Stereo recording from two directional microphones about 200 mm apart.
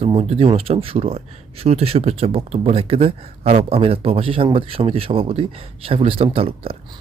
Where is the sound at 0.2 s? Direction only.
30° right (ahead or behind).